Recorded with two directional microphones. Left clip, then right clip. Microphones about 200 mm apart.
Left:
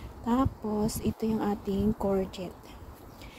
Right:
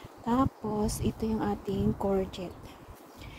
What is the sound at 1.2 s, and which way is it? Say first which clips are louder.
Speech: left 2 dB; centre (ahead or behind).